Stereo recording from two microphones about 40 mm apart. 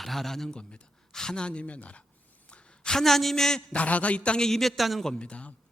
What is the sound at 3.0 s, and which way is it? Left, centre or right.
Speech, centre.